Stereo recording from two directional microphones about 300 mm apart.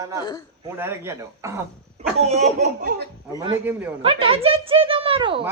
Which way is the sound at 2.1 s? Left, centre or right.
Right.